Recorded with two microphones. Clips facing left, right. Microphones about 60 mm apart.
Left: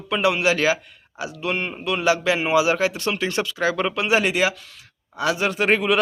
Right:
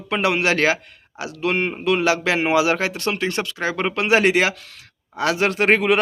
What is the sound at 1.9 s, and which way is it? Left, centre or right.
A man's voice, right.